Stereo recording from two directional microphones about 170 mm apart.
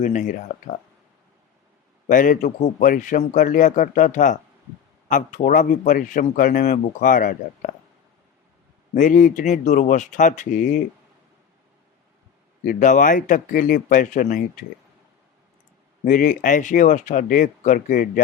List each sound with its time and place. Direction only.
0.0 s a man's voice: 50° left (ahead or behind)
2.0 s a man's voice: 55° left (ahead or behind)
9.0 s a man's voice: 50° left (ahead or behind)
12.6 s a man's voice: 50° left (ahead or behind)
16.0 s a man's voice: 50° left (ahead or behind)